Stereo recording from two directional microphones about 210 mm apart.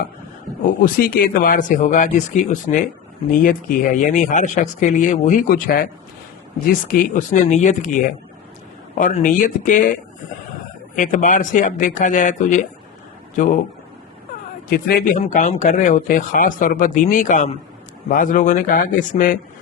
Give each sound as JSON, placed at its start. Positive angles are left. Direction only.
{"t": 0.8, "sound": "speech", "side_deg": 45}
{"t": 9.0, "sound": "speech", "side_deg": 40}
{"t": 14.7, "sound": "a man's voice", "side_deg": 45}